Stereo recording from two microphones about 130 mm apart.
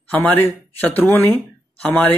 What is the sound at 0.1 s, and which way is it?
Speech, 15° left (ahead or behind).